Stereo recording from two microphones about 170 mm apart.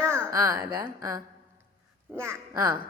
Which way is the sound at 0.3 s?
20° right (ahead or behind).